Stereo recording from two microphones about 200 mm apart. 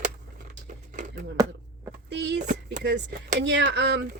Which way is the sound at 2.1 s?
60° right (ahead or behind).